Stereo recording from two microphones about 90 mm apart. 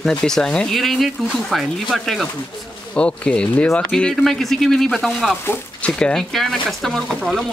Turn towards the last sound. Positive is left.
turn(degrees=0)  # may be behind; listen again after turning